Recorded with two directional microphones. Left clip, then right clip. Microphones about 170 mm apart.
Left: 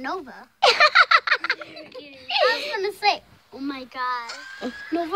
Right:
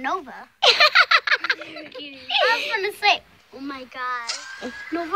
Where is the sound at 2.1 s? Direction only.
5° left (ahead or behind).